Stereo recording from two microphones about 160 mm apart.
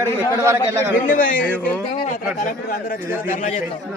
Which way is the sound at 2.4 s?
65° left (ahead or behind).